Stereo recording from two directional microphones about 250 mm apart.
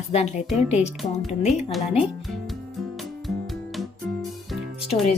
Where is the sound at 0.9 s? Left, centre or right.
Centre.